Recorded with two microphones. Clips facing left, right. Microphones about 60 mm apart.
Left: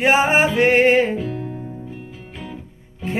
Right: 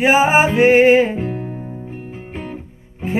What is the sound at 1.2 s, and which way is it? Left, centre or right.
Music, right.